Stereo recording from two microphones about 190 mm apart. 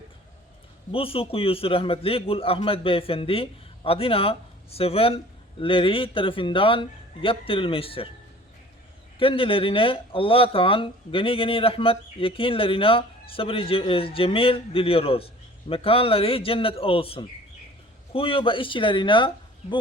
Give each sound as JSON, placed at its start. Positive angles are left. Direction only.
{"t": 0.9, "sound": "a man's voice", "side_deg": 30}
{"t": 9.1, "sound": "a man's voice", "side_deg": 30}